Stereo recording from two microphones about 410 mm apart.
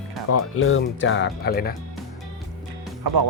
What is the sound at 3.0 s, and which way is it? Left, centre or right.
Speech, right.